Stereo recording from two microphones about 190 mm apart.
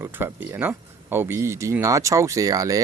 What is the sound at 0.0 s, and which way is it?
Speech, 10° right (ahead or behind).